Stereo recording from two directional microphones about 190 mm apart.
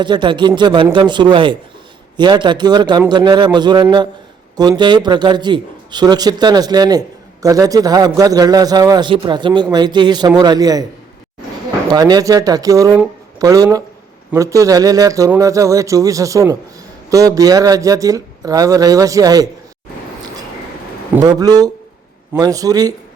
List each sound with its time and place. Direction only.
0.0 s a man's voice: 25° right (ahead or behind)
11.9 s a man's voice: 20° right (ahead or behind)
21.2 s a man's voice: 20° right (ahead or behind)